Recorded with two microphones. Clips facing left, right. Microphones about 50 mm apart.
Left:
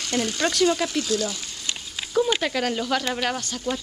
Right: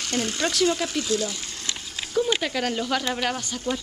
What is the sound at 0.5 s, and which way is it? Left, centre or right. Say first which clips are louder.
Speech: left 2 dB; centre.